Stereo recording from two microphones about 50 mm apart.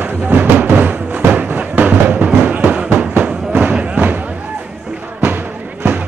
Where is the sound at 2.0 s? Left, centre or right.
Right.